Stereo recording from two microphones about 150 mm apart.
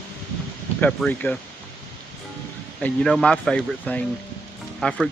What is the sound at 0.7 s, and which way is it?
Speech, 10° left (ahead or behind).